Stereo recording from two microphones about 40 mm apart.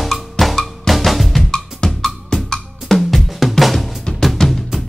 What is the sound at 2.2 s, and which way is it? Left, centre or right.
Music, centre.